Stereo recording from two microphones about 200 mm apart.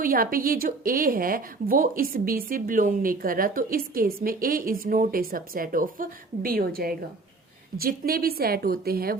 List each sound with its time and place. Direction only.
0.0 s a woman's voice: 45° right (ahead or behind)